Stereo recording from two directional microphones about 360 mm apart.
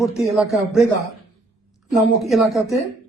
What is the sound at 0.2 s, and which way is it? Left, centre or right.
Speech, centre.